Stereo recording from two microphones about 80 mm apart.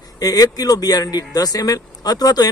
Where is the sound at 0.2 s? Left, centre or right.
Left.